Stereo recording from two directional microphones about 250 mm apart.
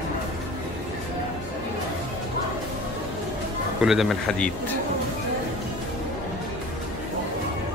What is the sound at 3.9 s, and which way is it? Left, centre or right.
Speech, centre.